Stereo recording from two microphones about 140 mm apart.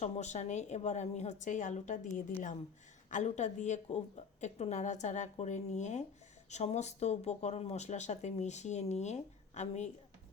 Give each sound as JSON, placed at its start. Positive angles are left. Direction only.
{"t": 0.0, "sound": "speech", "side_deg": 55}